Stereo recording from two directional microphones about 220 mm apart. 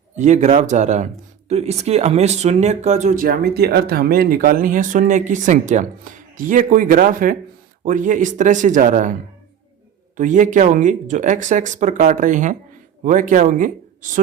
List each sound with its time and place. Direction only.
0.2 s speech: 30° right (ahead or behind)
10.2 s speech: 35° right (ahead or behind)